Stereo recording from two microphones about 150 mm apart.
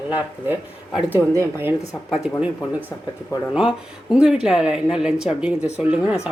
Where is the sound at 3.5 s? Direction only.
5° right (ahead or behind).